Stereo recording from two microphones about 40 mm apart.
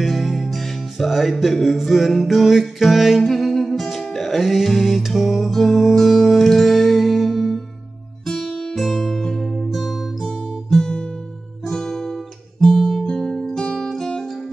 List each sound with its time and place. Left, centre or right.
0.0 s music: centre
8.5 s music: centre
8.7 s music: centre
10.2 s guitar: centre